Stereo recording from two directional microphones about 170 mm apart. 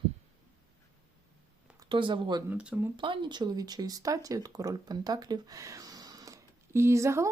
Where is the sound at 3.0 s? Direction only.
30° right (ahead or behind).